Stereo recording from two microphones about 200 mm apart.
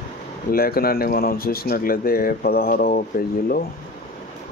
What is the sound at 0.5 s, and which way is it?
Speech, 50° left (ahead or behind).